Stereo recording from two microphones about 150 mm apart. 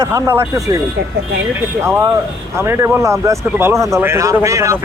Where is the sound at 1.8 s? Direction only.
15° right (ahead or behind).